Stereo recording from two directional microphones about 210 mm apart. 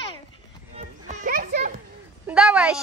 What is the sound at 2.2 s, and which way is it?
Speech, 5° right (ahead or behind).